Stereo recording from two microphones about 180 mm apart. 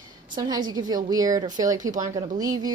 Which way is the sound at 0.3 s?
20° right (ahead or behind).